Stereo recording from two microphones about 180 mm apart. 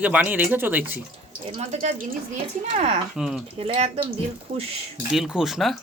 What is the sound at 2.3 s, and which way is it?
Speech, 35° right (ahead or behind).